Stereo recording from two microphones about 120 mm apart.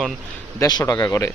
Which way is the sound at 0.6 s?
30° left (ahead or behind).